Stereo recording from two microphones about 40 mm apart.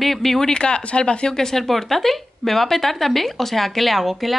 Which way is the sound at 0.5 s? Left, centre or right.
Left.